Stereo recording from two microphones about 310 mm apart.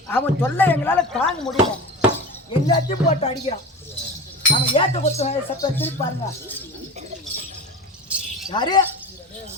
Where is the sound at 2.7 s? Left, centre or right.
Centre.